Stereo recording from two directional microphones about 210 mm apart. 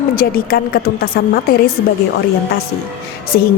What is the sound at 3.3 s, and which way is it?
Speech, 50° left (ahead or behind).